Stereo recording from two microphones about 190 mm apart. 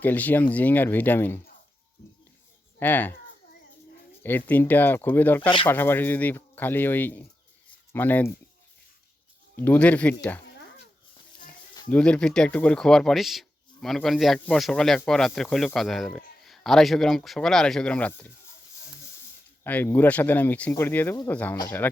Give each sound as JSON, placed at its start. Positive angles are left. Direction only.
{"t": 0.0, "sound": "speech", "side_deg": 10}
{"t": 2.7, "sound": "speech", "side_deg": 10}
{"t": 4.2, "sound": "speech", "side_deg": 10}
{"t": 5.4, "sound": "speech", "side_deg": 25}
{"t": 5.6, "sound": "speech", "side_deg": 10}
{"t": 9.6, "sound": "speech", "side_deg": 10}
{"t": 11.9, "sound": "speech", "side_deg": 5}
{"t": 19.6, "sound": "speech", "side_deg": 10}